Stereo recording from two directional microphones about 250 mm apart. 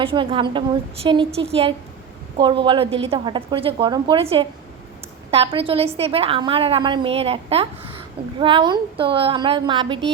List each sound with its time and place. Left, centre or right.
0.0 s a woman's voice: right